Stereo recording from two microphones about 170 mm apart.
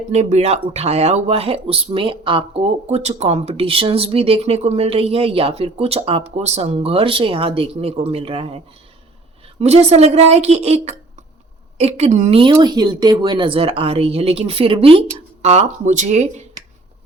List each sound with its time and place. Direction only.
0.1 s speech: 40° right (ahead or behind)
11.8 s speech: 40° right (ahead or behind)
12.4 s speech: 25° right (ahead or behind); by 16.3 s 45° right (ahead or behind)